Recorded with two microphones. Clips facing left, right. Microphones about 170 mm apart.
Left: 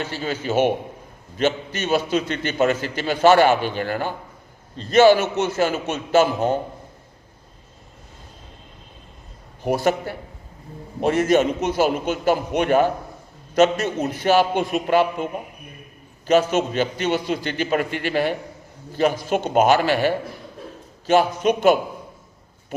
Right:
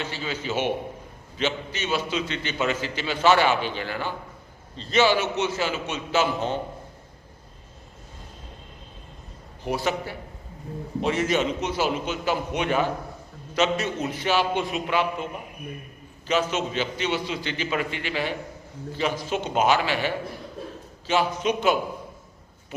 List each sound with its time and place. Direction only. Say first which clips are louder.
0.0 s a man's voice: left 4 dB; 50° left (ahead or behind)
9.6 s a man's voice: left 6 dB; 50° left (ahead or behind)